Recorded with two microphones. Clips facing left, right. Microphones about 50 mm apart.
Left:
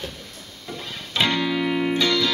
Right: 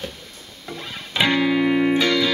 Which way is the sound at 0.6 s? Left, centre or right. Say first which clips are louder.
Right 1 dB; centre.